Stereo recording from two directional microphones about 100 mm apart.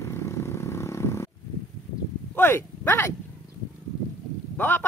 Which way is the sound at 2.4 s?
20° left (ahead or behind).